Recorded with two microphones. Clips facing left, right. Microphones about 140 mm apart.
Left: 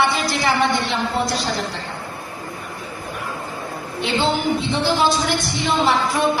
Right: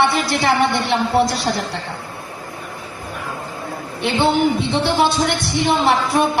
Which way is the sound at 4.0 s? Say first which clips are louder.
Right 4 dB; 60° right (ahead or behind).